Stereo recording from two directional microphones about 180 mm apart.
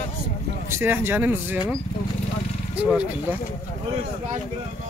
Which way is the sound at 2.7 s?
5° right (ahead or behind).